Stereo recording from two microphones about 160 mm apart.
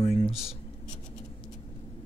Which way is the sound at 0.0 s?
40° left (ahead or behind).